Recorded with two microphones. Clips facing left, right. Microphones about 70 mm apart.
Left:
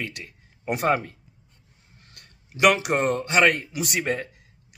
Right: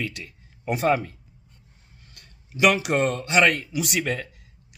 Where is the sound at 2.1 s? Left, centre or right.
Left.